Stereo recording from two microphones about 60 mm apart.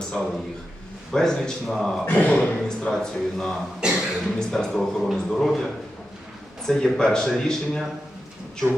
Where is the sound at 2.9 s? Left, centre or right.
Centre.